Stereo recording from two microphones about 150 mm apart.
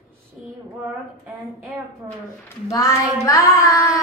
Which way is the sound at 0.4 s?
5° right (ahead or behind).